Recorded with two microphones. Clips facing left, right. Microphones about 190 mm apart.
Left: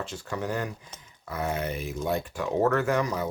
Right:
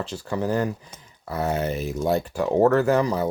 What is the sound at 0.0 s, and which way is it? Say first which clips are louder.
Speech: right 6 dB; 35° right (ahead or behind).